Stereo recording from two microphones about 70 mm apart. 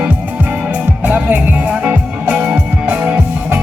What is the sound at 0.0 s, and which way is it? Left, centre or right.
Music, right.